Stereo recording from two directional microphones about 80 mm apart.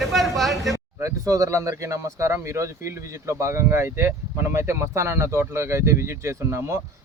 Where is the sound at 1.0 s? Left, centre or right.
Right.